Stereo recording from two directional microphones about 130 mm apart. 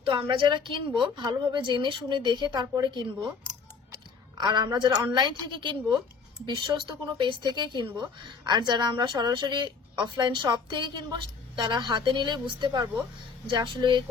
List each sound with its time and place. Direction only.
0.2 s speech: 40° right (ahead or behind)
4.4 s speech: 35° right (ahead or behind)